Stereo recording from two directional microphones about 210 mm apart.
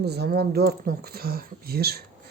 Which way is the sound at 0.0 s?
50° right (ahead or behind).